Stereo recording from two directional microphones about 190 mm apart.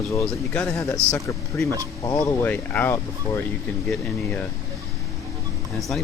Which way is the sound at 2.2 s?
10° left (ahead or behind).